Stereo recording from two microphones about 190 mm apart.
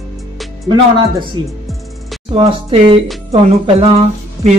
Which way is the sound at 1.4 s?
25° right (ahead or behind).